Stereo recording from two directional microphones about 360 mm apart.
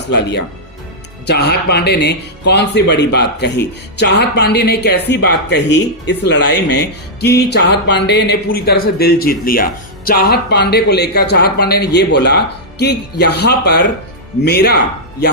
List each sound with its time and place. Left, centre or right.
0.1 s a man's voice: left